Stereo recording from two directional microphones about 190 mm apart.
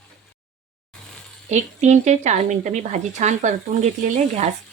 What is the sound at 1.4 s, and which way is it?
Speech, 40° right (ahead or behind).